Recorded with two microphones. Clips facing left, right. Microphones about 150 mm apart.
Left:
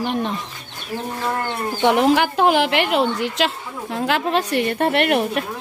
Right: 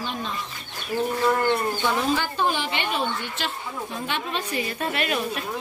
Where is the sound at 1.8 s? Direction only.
75° left (ahead or behind).